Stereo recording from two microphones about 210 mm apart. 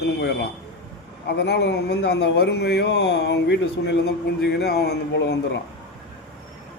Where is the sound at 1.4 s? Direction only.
55° left (ahead or behind).